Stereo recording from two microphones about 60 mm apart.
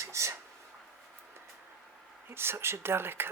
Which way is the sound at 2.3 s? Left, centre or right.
Right.